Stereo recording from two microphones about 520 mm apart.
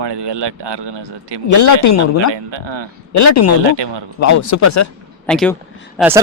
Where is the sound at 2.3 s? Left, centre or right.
Right.